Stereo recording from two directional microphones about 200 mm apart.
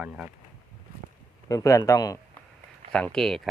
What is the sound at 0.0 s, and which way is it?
Speech, 5° right (ahead or behind).